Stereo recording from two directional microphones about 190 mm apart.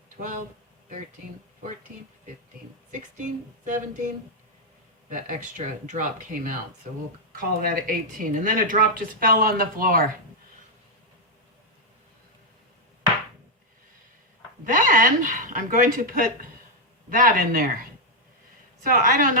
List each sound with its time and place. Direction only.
2.9 s speech: 40° right (ahead or behind)
14.6 s speech: 45° right (ahead or behind)
18.8 s speech: 45° right (ahead or behind)